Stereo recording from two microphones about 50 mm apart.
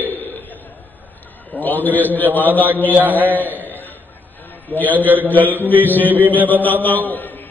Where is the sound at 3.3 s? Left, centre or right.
Left.